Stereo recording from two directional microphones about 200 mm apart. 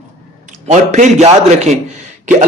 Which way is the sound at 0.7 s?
35° right (ahead or behind).